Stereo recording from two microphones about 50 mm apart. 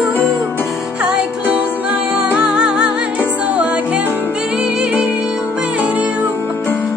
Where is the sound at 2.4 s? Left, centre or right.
Centre.